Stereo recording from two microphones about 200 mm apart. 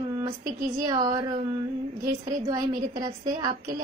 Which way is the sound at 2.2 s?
20° right (ahead or behind).